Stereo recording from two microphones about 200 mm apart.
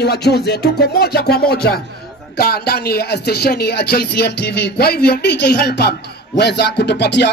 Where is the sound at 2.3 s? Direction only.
50° left (ahead or behind).